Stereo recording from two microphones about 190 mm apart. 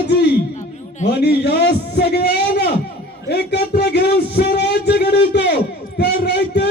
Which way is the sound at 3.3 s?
60° left (ahead or behind).